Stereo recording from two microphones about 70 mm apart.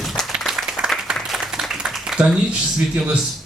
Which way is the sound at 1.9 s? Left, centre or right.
Centre.